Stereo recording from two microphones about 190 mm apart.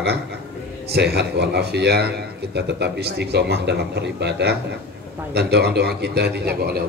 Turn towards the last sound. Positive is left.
turn(degrees=-55)  # may be behind; listen again after turning